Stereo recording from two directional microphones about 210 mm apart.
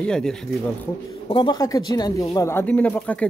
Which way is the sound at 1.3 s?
20° left (ahead or behind).